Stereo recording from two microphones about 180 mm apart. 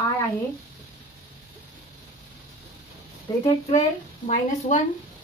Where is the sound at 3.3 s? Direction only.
20° left (ahead or behind).